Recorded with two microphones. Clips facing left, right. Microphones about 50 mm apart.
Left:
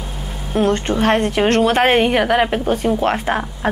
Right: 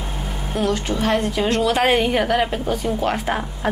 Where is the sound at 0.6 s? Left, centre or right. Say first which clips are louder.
Left 5 dB; left.